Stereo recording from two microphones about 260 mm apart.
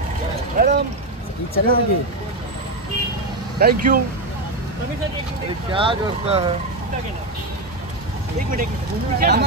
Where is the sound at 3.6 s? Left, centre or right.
Right.